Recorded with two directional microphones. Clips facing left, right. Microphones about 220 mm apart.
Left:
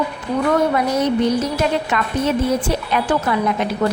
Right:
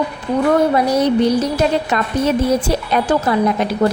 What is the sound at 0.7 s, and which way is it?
A woman's voice, 35° right (ahead or behind).